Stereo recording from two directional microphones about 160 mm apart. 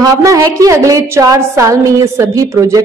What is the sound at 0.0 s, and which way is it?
A woman's voice, 20° right (ahead or behind).